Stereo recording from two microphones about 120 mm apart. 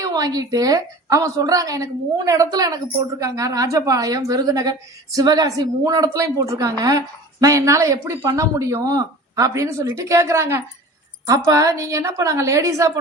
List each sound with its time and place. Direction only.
0.0 s speech: 30° right (ahead or behind)